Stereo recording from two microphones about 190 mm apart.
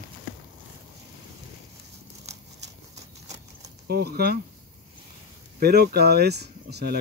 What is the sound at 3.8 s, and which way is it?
Speech, 55° right (ahead or behind).